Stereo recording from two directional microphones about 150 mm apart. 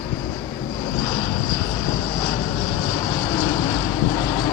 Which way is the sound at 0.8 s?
25° left (ahead or behind).